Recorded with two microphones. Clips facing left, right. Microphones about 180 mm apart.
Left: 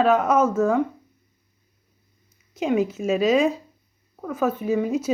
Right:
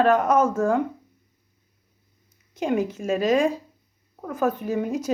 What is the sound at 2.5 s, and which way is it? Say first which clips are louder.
Speech: left 2 dB; 5° left (ahead or behind).